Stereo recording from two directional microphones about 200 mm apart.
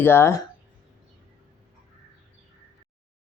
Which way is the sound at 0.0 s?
10° left (ahead or behind).